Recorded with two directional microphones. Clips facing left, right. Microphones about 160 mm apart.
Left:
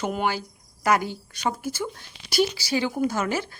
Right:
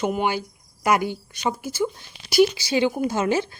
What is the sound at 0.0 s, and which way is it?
Speech, 5° right (ahead or behind).